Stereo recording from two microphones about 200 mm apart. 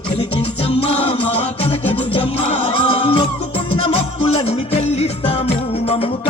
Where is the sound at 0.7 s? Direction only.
30° left (ahead or behind).